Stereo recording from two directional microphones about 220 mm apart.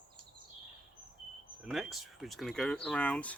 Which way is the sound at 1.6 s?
Centre (ahead or behind).